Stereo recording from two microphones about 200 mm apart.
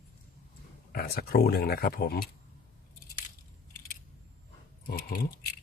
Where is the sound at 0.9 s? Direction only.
50° left (ahead or behind).